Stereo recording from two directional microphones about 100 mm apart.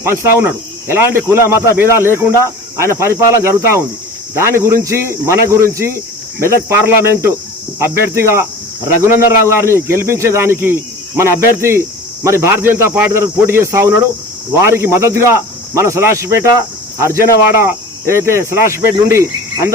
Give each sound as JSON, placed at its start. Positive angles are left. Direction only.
{"t": 0.0, "sound": "speech", "side_deg": -25}
{"t": 16.5, "sound": "cricket", "side_deg": -35}
{"t": 17.6, "sound": "speech", "side_deg": -30}